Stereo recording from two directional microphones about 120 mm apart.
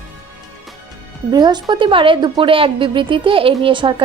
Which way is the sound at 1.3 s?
35° right (ahead or behind).